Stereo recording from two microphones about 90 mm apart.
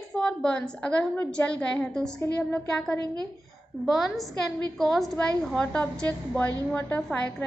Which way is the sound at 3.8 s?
Centre (ahead or behind).